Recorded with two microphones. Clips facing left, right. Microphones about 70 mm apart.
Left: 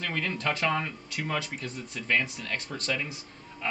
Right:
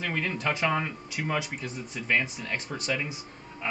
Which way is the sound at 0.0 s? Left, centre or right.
Centre.